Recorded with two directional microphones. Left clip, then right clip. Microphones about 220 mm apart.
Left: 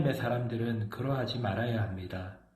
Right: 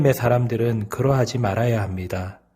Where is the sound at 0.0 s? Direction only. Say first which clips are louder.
Right 13 dB; 55° right (ahead or behind).